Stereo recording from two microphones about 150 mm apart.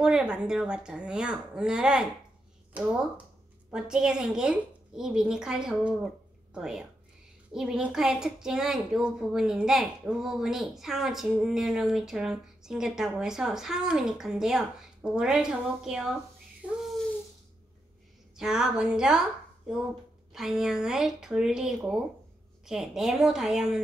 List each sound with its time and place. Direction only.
0.0 s a woman's voice: 5° right (ahead or behind)
16.6 s a sound: 5° right (ahead or behind)
18.4 s a woman's voice: 5° right (ahead or behind)
20.3 s a woman's voice: centre (ahead or behind)